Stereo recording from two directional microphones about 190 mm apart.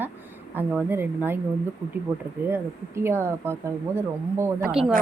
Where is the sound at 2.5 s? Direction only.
10° right (ahead or behind).